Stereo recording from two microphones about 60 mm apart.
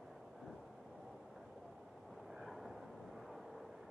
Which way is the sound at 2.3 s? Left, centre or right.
Centre.